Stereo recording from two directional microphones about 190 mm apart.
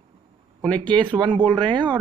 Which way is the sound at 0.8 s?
25° right (ahead or behind).